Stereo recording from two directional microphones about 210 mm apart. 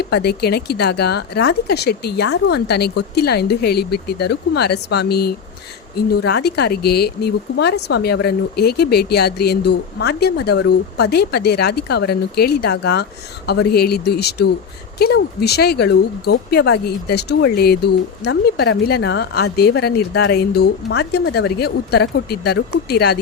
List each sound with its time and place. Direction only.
0.1 s speech: 50° left (ahead or behind)